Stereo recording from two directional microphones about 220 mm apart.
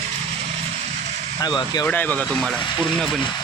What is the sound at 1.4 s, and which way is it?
Speech, 20° left (ahead or behind).